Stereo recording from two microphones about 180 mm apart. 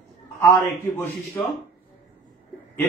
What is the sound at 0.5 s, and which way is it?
Speech, 15° left (ahead or behind).